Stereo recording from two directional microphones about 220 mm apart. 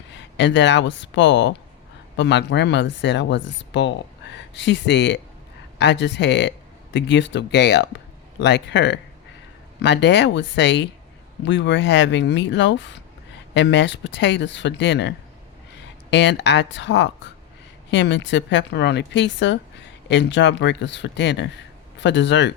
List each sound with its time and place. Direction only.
0.1 s speech: 55° left (ahead or behind)